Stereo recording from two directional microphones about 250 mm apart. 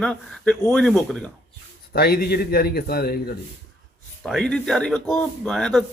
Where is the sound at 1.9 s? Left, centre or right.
Left.